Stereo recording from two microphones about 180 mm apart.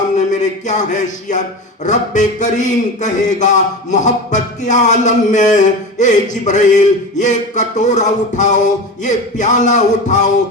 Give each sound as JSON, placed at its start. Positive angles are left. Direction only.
{"t": 0.2, "sound": "speech", "side_deg": 40}